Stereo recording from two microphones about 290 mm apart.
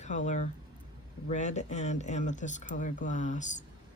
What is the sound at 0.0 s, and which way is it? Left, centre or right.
Speech, left.